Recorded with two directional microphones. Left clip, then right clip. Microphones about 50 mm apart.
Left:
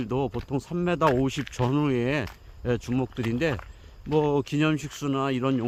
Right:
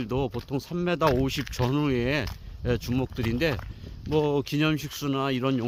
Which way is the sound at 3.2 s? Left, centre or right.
Centre.